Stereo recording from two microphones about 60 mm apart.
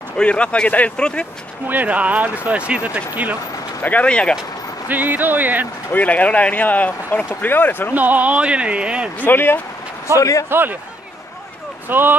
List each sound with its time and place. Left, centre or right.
0.2 s speech: centre
1.7 s speech: right
3.8 s speech: left
4.8 s speech: right
5.9 s speech: left
7.9 s speech: right
9.2 s speech: left
10.1 s a man's voice: left
10.5 s speech: right
11.9 s speech: right